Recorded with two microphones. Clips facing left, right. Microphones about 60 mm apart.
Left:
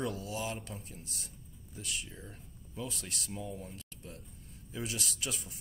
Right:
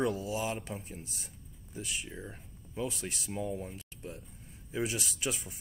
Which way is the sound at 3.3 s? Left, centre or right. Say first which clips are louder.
Right 7 dB; right.